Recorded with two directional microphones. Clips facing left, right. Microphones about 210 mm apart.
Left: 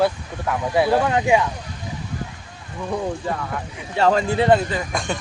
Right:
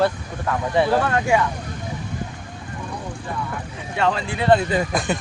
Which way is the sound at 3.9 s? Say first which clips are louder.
Left 4 dB; 40° left (ahead or behind).